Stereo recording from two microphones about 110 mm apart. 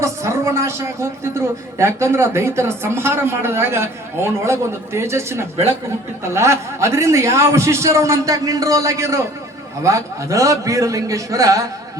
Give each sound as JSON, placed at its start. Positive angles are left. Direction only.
{"t": 0.0, "sound": "speech", "side_deg": -30}